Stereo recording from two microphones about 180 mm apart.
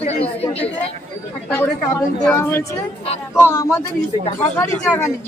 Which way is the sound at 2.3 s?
10° left (ahead or behind).